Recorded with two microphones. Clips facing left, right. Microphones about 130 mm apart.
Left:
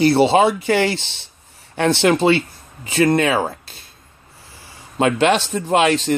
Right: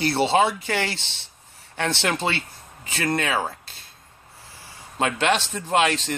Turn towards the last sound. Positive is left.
turn(degrees=10)  # may be behind; listen again after turning